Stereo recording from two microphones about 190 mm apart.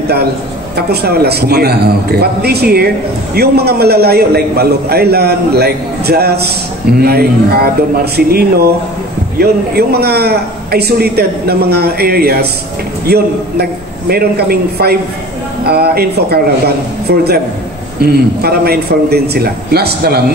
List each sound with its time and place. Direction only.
1.0 s a man's voice: 55° right (ahead or behind)